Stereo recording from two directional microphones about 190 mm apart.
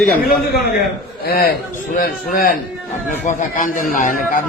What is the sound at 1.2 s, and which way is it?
A man's voice, 55° left (ahead or behind).